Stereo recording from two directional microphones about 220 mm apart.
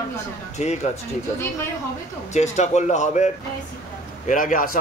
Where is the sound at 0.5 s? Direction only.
30° left (ahead or behind).